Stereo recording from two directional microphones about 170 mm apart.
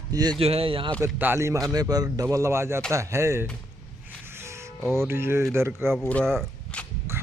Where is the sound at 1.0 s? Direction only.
15° right (ahead or behind).